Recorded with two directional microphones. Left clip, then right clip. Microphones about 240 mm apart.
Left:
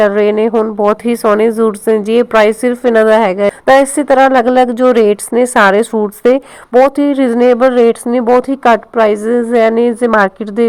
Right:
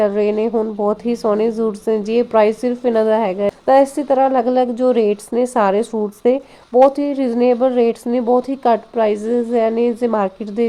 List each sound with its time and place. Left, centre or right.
0.0 s a woman's voice: centre